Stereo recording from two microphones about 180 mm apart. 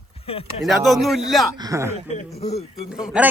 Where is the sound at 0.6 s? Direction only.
Centre (ahead or behind).